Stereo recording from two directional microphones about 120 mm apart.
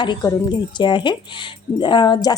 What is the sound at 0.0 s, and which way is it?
A woman's voice, 40° left (ahead or behind).